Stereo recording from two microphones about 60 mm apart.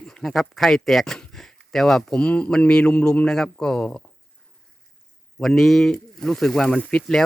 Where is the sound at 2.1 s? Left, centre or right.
Centre.